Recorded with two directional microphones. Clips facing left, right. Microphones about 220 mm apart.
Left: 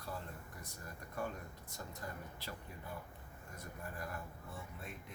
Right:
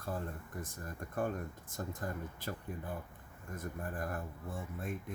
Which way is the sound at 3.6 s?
50° right (ahead or behind).